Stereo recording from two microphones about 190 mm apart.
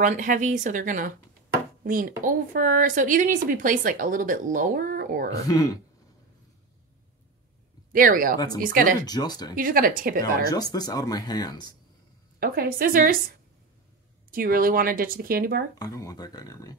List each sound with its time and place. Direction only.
0.0 s a woman's voice: 45° right (ahead or behind)
5.5 s speech: 20° left (ahead or behind)
7.9 s a woman's voice: 45° right (ahead or behind)
9.0 s speech: 20° left (ahead or behind)
9.6 s a woman's voice: 45° right (ahead or behind)
10.5 s speech: 20° left (ahead or behind)
12.4 s a woman's voice: 50° right (ahead or behind)
14.3 s a woman's voice: 50° right (ahead or behind)
15.7 s speech: 20° left (ahead or behind)